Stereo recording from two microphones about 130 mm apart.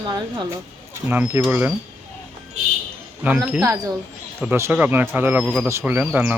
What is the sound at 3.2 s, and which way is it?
Speech, 15° right (ahead or behind).